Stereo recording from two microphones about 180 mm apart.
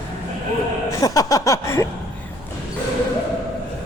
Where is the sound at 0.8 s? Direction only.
20° left (ahead or behind).